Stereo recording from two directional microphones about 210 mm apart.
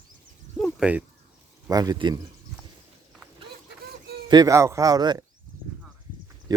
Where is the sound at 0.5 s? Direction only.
5° left (ahead or behind).